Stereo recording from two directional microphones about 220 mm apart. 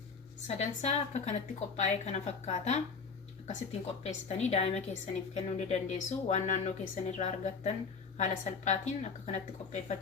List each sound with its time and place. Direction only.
0.4 s a woman's voice: 30° left (ahead or behind)